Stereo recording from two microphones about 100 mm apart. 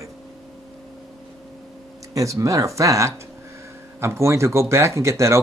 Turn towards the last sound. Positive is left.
turn(degrees=-30)  # may be behind; listen again after turning